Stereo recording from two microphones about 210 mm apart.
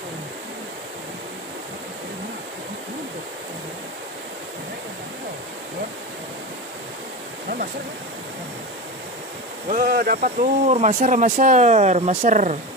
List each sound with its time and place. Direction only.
9.7 s speech: 45° right (ahead or behind)